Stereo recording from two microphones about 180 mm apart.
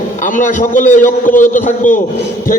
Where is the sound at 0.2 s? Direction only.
45° left (ahead or behind).